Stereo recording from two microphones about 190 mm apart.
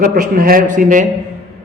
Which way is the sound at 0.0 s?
45° right (ahead or behind).